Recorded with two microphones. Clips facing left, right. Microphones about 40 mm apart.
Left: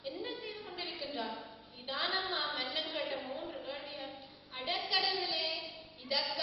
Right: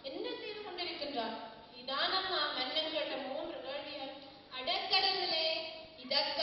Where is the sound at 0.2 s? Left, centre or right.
Centre.